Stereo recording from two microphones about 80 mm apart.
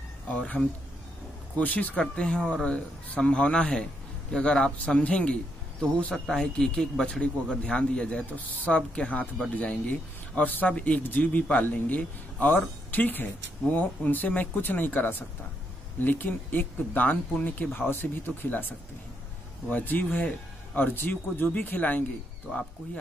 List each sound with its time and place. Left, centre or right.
0.3 s speech: centre
1.6 s speech: centre
19.7 s speech: left